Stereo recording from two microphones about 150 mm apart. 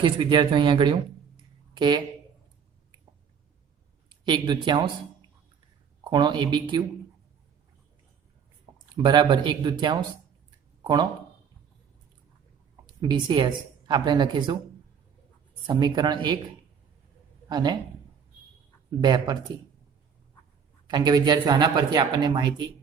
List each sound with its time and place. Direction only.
0.0 s speech: 35° right (ahead or behind)
4.1 s speech: 30° right (ahead or behind)
6.1 s speech: 30° right (ahead or behind)
9.0 s speech: 30° right (ahead or behind)
12.8 s speech: 30° right (ahead or behind)
15.6 s speech: 30° right (ahead or behind)
17.5 s speech: 30° right (ahead or behind)
18.9 s speech: 30° right (ahead or behind)
20.8 s speech: 30° right (ahead or behind)